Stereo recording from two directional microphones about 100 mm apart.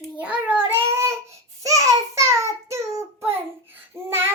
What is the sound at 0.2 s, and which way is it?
Child singing, 15° right (ahead or behind).